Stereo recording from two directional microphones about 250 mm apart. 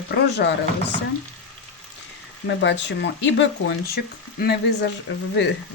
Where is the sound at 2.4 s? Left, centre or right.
Left.